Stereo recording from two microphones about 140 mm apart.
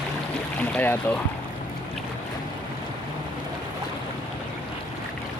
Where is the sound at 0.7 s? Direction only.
15° left (ahead or behind).